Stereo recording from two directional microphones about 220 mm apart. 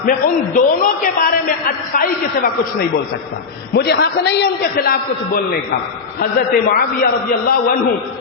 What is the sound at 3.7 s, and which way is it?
Speech, 50° left (ahead or behind).